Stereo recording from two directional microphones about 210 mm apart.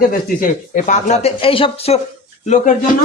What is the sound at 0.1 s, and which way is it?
Speech, 40° left (ahead or behind).